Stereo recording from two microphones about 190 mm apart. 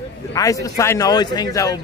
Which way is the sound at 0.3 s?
15° left (ahead or behind).